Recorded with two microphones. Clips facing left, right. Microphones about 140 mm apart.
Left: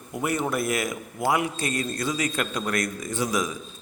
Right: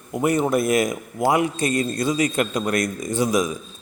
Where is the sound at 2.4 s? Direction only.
20° right (ahead or behind).